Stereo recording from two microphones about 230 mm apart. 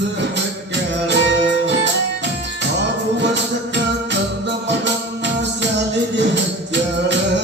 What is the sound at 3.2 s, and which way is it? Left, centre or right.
Music, right.